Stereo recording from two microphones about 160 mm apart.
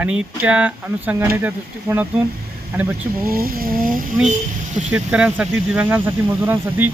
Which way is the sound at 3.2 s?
65° right (ahead or behind).